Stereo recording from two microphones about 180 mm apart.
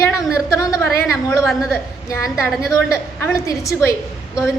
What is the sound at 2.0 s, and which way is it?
A woman's voice, 15° left (ahead or behind).